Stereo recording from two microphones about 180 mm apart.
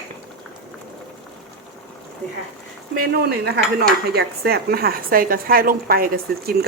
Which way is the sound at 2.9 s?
55° right (ahead or behind).